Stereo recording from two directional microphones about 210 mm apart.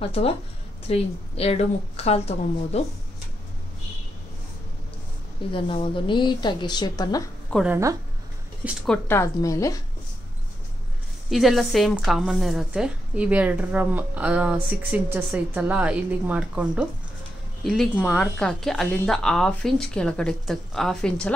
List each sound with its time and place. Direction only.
0.1 s a woman's voice: 30° left (ahead or behind)
5.5 s a woman's voice: 25° left (ahead or behind)
7.5 s speech: 10° right (ahead or behind)
8.6 s speech: 5° left (ahead or behind)
11.2 s speech: centre (ahead or behind)